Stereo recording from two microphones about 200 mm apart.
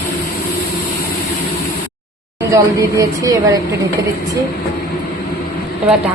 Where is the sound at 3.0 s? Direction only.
15° right (ahead or behind).